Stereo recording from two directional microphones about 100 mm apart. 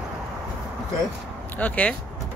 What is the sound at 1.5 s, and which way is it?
Speech, 15° left (ahead or behind).